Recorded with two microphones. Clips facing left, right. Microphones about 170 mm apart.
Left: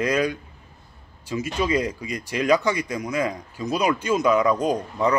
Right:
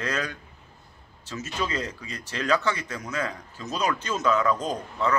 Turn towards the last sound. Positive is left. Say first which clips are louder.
# left 5 dB
turn(degrees=15)  # may be behind; listen again after turning